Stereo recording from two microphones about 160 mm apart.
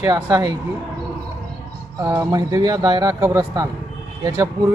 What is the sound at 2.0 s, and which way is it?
Speech, 20° right (ahead or behind).